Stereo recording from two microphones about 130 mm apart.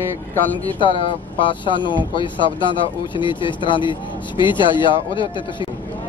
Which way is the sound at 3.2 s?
40° left (ahead or behind).